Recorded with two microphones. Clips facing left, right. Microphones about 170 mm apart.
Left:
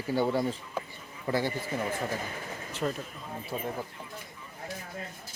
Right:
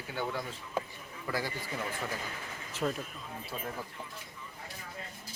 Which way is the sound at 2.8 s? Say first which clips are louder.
Left 1 dB; 5° left (ahead or behind).